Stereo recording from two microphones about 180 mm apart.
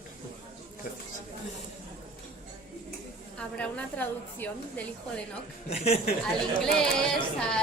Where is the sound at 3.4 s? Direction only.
5° left (ahead or behind).